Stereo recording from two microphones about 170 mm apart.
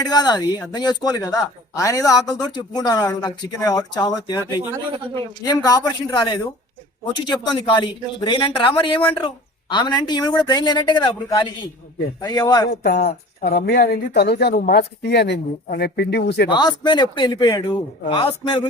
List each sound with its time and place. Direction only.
0.0 s speech: 25° left (ahead or behind)
12.8 s speech: 65° left (ahead or behind)
16.5 s a man's voice: 25° left (ahead or behind)